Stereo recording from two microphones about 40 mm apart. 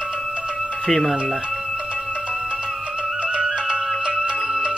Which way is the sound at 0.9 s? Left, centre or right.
Centre.